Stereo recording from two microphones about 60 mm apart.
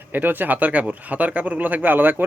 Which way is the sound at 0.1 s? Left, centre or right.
Right.